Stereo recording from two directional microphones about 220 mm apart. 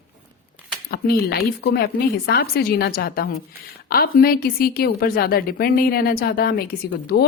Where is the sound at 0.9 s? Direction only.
45° left (ahead or behind).